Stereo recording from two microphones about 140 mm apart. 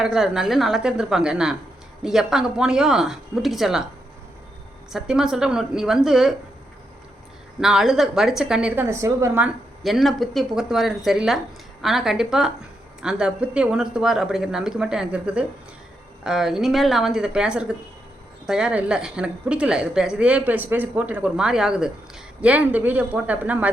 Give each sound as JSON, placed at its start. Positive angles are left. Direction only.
{"t": 0.0, "sound": "speech", "side_deg": -5}
{"t": 4.9, "sound": "speech", "side_deg": -5}
{"t": 7.6, "sound": "speech", "side_deg": -5}
{"t": 9.8, "sound": "a woman's voice", "side_deg": 0}